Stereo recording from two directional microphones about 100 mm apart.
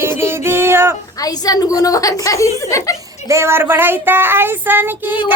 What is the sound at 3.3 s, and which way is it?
Child singing, 25° right (ahead or behind).